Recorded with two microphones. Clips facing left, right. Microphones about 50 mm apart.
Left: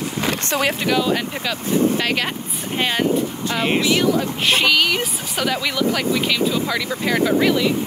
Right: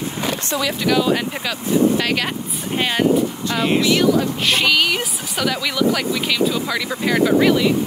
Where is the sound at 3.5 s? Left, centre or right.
Left.